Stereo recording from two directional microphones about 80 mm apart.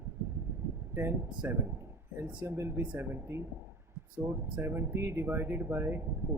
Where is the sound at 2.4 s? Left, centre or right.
Right.